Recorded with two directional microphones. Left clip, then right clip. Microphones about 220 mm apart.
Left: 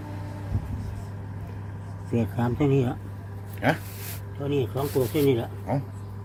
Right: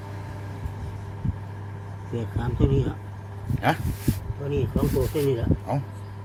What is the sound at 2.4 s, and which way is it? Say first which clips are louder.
Speech: left 1 dB; 30° left (ahead or behind).